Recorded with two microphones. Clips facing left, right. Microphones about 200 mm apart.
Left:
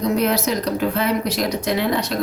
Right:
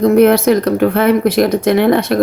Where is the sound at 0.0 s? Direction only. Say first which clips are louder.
Right 10 dB; 55° right (ahead or behind).